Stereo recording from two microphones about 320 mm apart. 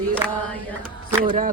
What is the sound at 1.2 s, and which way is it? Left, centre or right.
Speech, right.